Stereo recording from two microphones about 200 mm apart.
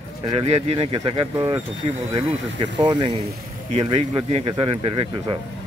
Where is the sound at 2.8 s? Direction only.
20° right (ahead or behind).